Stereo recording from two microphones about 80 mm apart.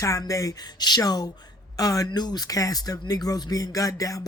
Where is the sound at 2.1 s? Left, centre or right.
Left.